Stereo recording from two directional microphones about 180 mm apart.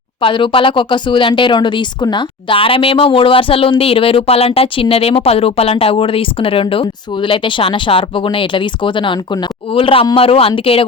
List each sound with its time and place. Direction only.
0.2 s speech: 30° left (ahead or behind)